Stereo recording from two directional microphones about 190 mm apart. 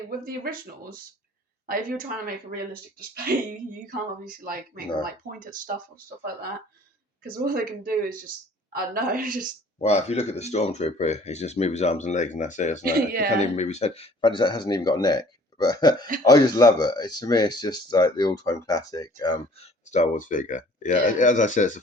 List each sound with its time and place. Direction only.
1.6 s speech: 50° right (ahead or behind)
4.3 s speech: 50° right (ahead or behind)
7.3 s speech: 50° right (ahead or behind)
9.7 s speech: 35° left (ahead or behind)
12.8 s speech: 55° right (ahead or behind)
13.4 s speech: 35° left (ahead or behind)
19.9 s speech: 40° left (ahead or behind)